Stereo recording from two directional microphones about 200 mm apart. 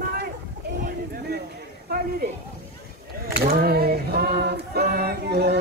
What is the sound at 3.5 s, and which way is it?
Female singing, 50° right (ahead or behind).